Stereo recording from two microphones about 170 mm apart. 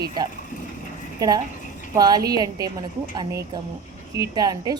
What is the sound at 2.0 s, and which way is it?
A woman's voice, 20° right (ahead or behind).